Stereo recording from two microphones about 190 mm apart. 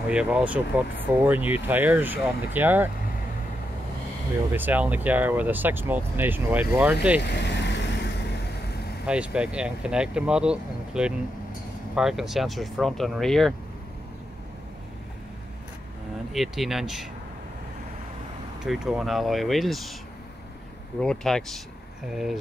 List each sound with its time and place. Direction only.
0.1 s speech: 5° right (ahead or behind)
4.5 s speech: 10° right (ahead or behind)
7.2 s vehicle: 65° left (ahead or behind)
9.0 s speech: 5° right (ahead or behind)
16.3 s speech: centre (ahead or behind)
18.6 s speech: centre (ahead or behind)
21.0 s speech: 5° left (ahead or behind)